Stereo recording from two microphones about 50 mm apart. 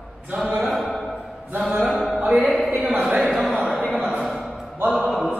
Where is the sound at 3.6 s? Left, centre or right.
Right.